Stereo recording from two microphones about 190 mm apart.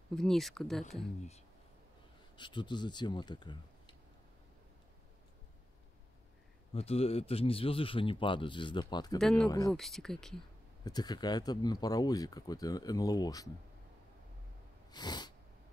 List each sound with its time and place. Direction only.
0.1 s speech: centre (ahead or behind)
2.3 s speech: 25° left (ahead or behind)
6.7 s speech: 30° left (ahead or behind)
9.2 s speech: 5° left (ahead or behind)
10.8 s speech: 20° left (ahead or behind)
14.9 s sneeze: 20° left (ahead or behind)